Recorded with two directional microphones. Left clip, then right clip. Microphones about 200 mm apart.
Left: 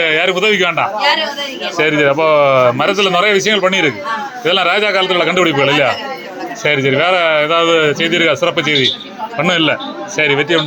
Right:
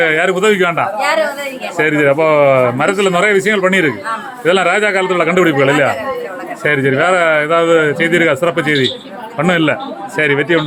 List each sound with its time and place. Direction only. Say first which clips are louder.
0.0 s speech: right 1 dB; 15° right (ahead or behind)